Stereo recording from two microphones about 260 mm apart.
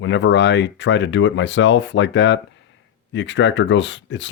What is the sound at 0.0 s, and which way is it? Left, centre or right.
Speech, left.